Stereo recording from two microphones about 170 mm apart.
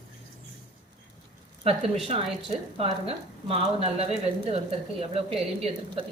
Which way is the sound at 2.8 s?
35° right (ahead or behind).